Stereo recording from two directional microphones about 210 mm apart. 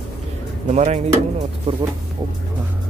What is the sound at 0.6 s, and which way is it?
Speech, 35° right (ahead or behind).